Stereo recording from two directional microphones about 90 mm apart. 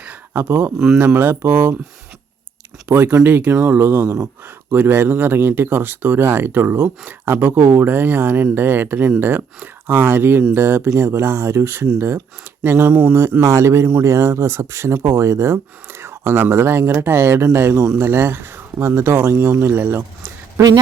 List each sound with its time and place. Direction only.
0.0 s a sound: 15° right (ahead or behind)
0.4 s speech: 30° right (ahead or behind)
2.9 s speech: 20° right (ahead or behind)
13.1 s speech: 30° right (ahead or behind)